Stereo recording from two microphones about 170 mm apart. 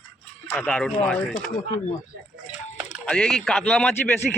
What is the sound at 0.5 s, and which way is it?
Speech, 5° left (ahead or behind).